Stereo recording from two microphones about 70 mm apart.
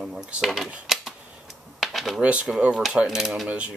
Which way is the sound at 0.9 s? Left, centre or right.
Centre.